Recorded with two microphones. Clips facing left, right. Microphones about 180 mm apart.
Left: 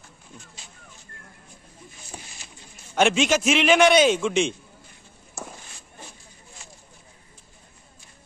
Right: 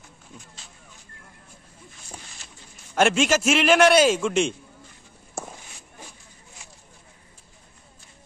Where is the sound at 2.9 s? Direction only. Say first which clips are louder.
Even; 5° right (ahead or behind).